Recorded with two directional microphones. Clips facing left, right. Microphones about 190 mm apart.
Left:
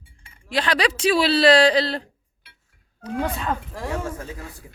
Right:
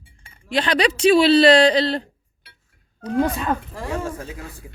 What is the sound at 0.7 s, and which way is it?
Speech, centre (ahead or behind).